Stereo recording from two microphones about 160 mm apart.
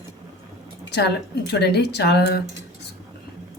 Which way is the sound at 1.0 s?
90° left.